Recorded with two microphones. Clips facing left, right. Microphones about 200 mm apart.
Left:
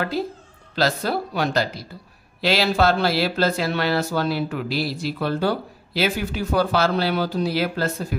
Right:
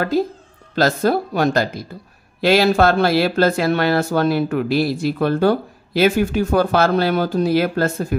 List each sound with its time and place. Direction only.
0.1 s speech: 45° right (ahead or behind)